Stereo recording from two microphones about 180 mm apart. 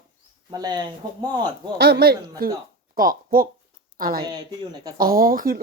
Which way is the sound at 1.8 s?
60° right (ahead or behind).